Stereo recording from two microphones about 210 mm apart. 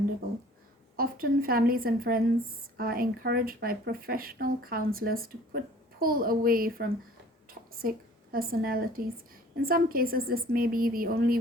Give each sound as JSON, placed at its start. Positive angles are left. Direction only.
{"t": 0.9, "sound": "a woman's voice", "side_deg": -45}